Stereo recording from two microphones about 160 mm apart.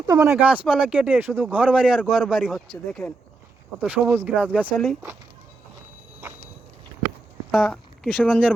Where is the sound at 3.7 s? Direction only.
15° right (ahead or behind).